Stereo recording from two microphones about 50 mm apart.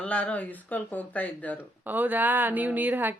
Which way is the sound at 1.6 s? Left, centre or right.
Right.